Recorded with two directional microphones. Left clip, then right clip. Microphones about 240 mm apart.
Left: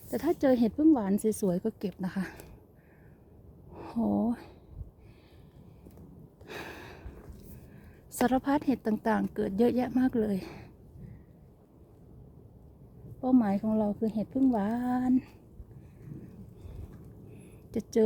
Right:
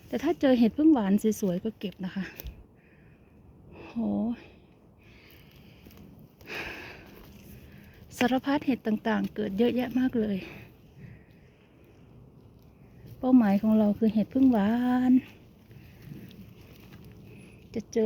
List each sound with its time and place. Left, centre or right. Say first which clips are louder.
0.1 s speech: right 1 dB; centre
1.5 s speech: left 1 dB; centre
3.8 s speech: left 2 dB; centre
6.4 s a sound: right 5 dB; centre
7.7 s a woman's voice: even; centre
13.2 s speech: right 4 dB; centre
17.7 s a sound: left 1 dB; centre